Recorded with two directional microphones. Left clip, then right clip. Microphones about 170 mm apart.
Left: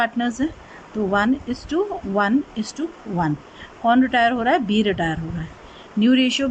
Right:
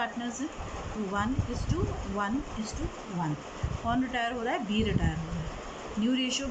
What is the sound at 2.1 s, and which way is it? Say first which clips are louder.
Speech: left 13 dB; 60° left (ahead or behind).